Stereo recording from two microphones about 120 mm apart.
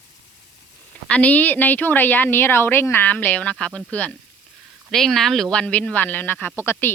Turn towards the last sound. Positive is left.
turn(degrees=20)  # may be behind; listen again after turning